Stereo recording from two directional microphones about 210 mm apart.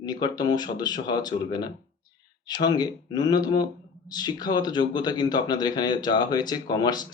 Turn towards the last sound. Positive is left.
turn(degrees=20)  # may be behind; listen again after turning